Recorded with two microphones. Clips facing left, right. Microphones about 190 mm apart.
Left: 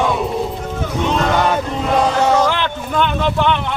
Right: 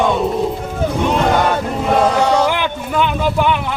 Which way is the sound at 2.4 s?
10° right (ahead or behind).